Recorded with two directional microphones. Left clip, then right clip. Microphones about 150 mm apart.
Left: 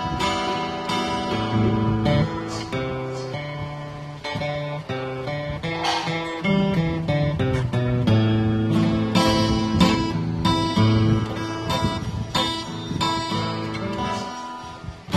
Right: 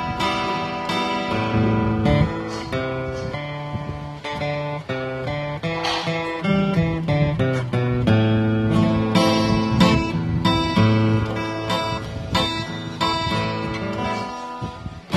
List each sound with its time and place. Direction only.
0.0 s music: 40° right (ahead or behind)
5.7 s music: 40° right (ahead or behind)